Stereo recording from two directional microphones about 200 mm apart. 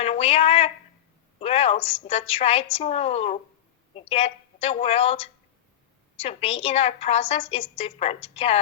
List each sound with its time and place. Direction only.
0.0 s a woman's voice: 30° left (ahead or behind)